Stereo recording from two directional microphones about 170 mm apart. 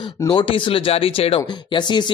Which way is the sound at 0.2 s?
25° left (ahead or behind).